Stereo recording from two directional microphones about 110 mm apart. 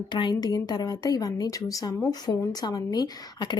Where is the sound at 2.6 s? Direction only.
40° left (ahead or behind).